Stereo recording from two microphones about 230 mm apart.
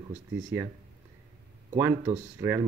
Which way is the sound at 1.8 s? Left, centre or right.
Centre.